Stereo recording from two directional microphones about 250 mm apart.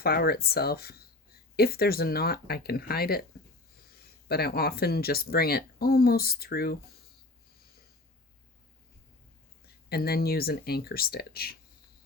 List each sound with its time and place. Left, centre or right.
0.0 s speech: left
4.3 s speech: left
9.9 s speech: left